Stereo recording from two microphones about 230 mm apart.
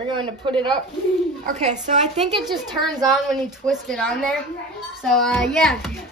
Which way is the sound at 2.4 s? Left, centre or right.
Centre.